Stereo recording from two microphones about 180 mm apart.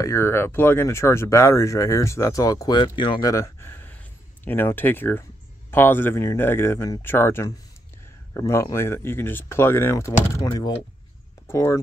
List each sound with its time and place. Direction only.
0.0 s speech: 15° left (ahead or behind)